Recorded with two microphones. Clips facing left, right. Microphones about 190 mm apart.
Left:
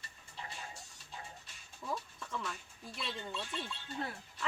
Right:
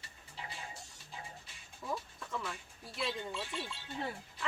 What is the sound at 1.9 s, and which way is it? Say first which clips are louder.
Speech: right 1 dB; 5° right (ahead or behind).